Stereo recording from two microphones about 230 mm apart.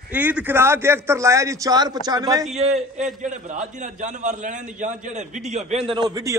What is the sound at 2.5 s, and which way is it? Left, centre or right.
A man's voice, right.